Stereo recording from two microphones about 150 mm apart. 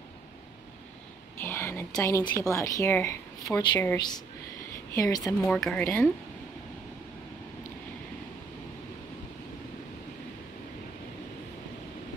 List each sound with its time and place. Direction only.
1.4 s a woman's voice: 15° left (ahead or behind)
5.4 s speech: 5° left (ahead or behind)